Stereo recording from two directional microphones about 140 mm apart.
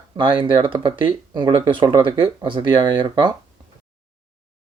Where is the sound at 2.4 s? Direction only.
35° right (ahead or behind).